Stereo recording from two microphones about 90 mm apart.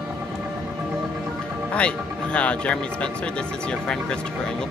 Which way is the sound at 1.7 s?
15° left (ahead or behind).